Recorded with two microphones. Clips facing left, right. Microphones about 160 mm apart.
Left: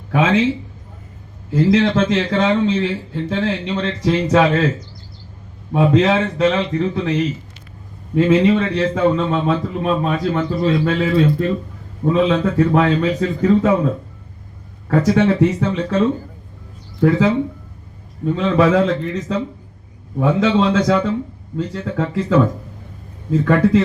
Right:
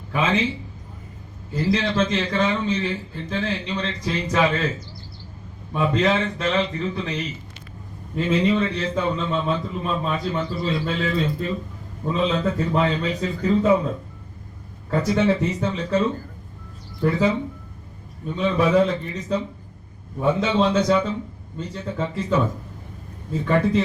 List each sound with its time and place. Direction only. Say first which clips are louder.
0.1 s a man's voice: left 6 dB; 90° left
1.7 s a man's voice: left 5 dB; 70° left (ahead or behind)
5.7 s a man's voice: left 6 dB; 80° left
8.1 s a man's voice: left 7 dB; 85° left
14.8 s a man's voice: left 5 dB; 70° left (ahead or behind); by 22.4 s 90° left